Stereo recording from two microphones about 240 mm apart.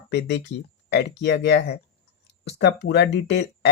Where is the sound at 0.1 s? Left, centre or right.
Left.